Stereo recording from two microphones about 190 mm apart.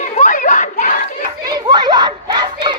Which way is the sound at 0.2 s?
40° left (ahead or behind).